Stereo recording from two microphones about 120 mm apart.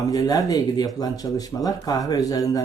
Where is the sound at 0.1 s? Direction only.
30° left (ahead or behind).